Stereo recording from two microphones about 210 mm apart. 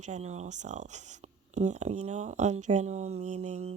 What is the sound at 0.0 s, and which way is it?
Speech, 35° right (ahead or behind).